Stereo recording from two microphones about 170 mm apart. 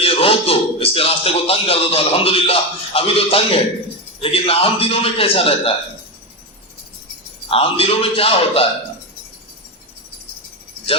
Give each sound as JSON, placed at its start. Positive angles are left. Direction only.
{"t": 0.0, "sound": "speech", "side_deg": 35}
{"t": 7.4, "sound": "speech", "side_deg": 35}